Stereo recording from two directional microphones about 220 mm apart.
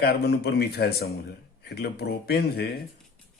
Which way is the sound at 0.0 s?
45° left (ahead or behind).